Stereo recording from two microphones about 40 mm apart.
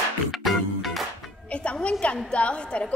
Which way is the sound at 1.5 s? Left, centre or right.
Left.